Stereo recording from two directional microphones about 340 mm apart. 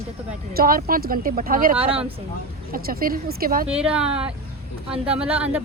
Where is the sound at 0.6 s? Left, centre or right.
Right.